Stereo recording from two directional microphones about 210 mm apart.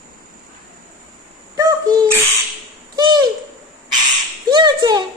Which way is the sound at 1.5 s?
20° right (ahead or behind).